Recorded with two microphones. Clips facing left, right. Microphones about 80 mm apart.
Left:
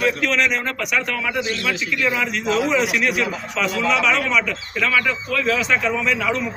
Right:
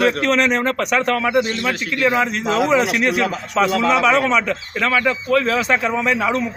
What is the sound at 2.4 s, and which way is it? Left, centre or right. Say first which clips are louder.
Speech: right 2 dB; right.